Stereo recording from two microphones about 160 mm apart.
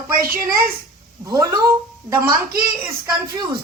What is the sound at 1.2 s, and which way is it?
Speech, 20° right (ahead or behind).